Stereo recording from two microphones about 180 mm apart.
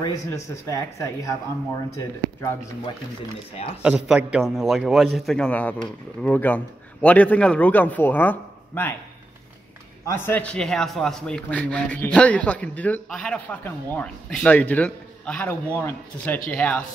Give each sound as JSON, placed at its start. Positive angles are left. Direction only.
{"t": 0.0, "sound": "speech", "side_deg": 20}
{"t": 3.8, "sound": "a man's voice", "side_deg": -5}
{"t": 10.0, "sound": "speech", "side_deg": 10}